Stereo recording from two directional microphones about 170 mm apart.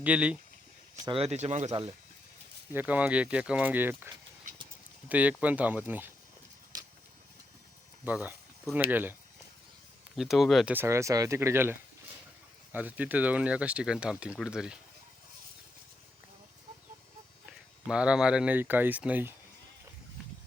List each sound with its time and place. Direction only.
0.0 s speech: 5° right (ahead or behind)
0.9 s speech: 25° right (ahead or behind)
1.2 s speech: 40° right (ahead or behind)
2.7 s speech: 10° right (ahead or behind)
8.0 s speech: 10° right (ahead or behind)
10.2 s speech: centre (ahead or behind)
10.8 s speech: 15° right (ahead or behind)
17.4 s speech: 5° right (ahead or behind)